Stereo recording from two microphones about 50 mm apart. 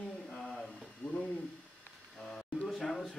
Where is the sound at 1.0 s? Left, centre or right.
Centre.